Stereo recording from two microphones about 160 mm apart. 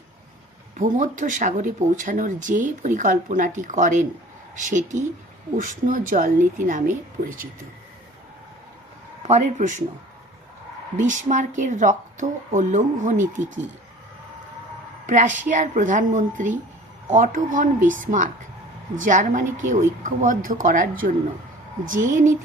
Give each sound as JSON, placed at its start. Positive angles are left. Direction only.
{"t": 0.8, "sound": "speech", "side_deg": -55}
{"t": 9.2, "sound": "speech", "side_deg": -45}
{"t": 10.9, "sound": "speech", "side_deg": -50}
{"t": 12.2, "sound": "speech", "side_deg": -40}
{"t": 12.5, "sound": "speech", "side_deg": -50}
{"t": 15.0, "sound": "speech", "side_deg": -50}